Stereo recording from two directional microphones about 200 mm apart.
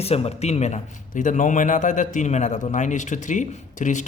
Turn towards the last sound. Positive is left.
turn(degrees=40)  # may be behind; listen again after turning